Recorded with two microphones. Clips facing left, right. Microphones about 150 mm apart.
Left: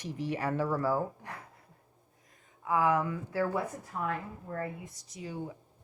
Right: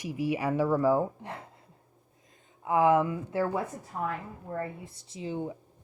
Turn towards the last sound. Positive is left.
turn(degrees=-25)  # may be behind; listen again after turning